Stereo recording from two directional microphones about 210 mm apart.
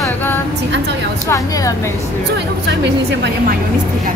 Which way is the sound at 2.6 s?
55° right (ahead or behind).